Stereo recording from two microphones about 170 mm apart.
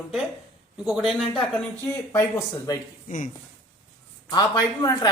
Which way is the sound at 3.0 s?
50° left (ahead or behind).